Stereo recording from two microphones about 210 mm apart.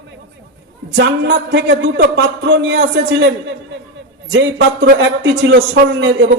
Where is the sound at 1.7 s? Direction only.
50° right (ahead or behind).